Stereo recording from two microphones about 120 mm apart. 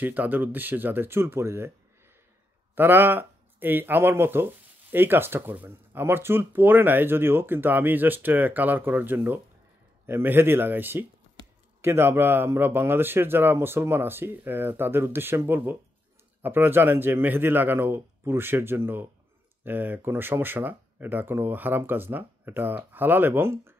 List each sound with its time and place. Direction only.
0.0 s speech: 15° right (ahead or behind)
2.7 s speech: 15° right (ahead or behind)